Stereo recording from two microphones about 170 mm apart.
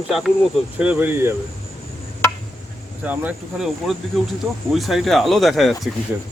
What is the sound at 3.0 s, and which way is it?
Speech, 10° right (ahead or behind).